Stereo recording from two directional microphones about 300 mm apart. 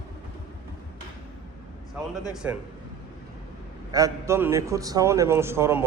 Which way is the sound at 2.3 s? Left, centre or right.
Centre.